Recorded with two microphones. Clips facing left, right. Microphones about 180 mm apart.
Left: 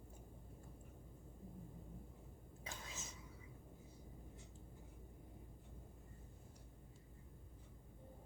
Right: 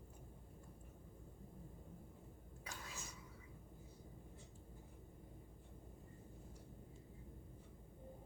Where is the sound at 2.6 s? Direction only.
20° left (ahead or behind).